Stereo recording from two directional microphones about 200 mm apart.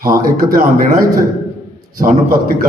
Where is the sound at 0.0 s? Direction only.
45° right (ahead or behind).